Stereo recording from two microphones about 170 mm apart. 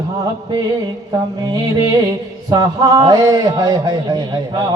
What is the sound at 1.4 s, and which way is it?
A man's voice, 25° right (ahead or behind).